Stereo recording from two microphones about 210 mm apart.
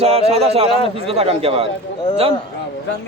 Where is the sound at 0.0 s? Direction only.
30° right (ahead or behind).